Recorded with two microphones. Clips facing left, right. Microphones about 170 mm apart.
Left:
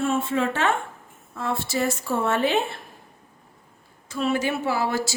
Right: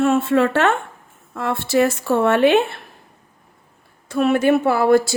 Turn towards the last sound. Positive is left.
turn(degrees=-55)  # may be behind; listen again after turning